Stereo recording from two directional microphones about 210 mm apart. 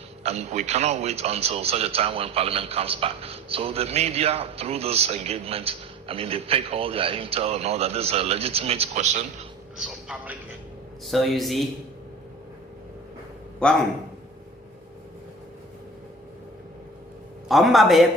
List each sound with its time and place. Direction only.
0.2 s speech: 30° right (ahead or behind)
9.7 s a man's voice: 5° right (ahead or behind)
17.5 s speech: centre (ahead or behind)